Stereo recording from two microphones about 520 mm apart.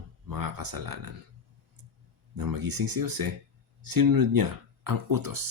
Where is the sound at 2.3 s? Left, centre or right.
Right.